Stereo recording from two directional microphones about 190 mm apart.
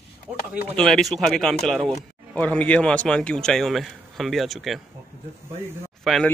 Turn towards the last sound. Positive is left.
turn(degrees=0)  # may be behind; listen again after turning